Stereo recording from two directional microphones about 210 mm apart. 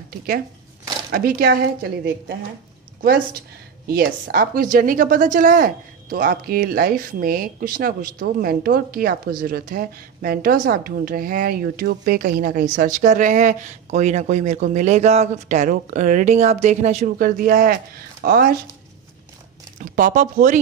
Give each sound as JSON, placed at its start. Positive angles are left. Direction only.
{"t": 1.1, "sound": "a woman's voice", "side_deg": -45}
{"t": 3.9, "sound": "a woman's voice", "side_deg": -45}
{"t": 19.8, "sound": "a woman's voice", "side_deg": -45}